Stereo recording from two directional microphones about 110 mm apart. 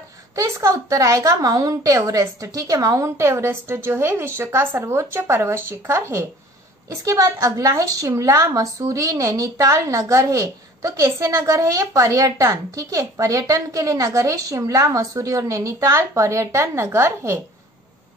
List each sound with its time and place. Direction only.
0.4 s a woman's voice: 30° right (ahead or behind)